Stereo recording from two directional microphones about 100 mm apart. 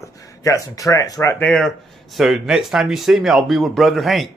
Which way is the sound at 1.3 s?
10° left (ahead or behind).